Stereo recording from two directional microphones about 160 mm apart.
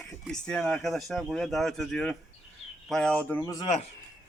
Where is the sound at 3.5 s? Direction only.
40° left (ahead or behind).